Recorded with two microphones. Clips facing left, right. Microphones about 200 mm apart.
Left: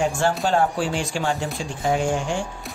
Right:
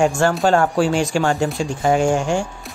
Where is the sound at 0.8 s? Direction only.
45° right (ahead or behind).